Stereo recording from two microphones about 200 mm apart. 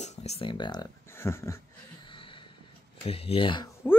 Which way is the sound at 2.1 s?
25° left (ahead or behind).